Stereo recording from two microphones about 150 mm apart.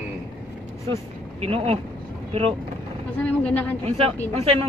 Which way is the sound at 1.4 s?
40° right (ahead or behind).